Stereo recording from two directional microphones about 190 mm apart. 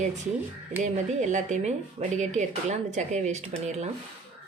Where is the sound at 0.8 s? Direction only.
35° right (ahead or behind).